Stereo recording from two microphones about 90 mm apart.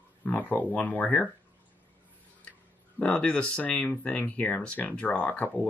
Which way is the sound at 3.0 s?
15° left (ahead or behind).